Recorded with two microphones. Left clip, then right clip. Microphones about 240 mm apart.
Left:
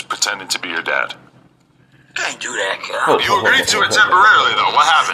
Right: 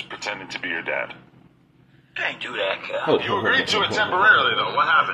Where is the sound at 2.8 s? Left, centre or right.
Left.